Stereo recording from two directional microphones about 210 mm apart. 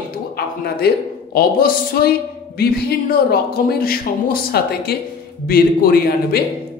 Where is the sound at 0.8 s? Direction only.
45° left (ahead or behind).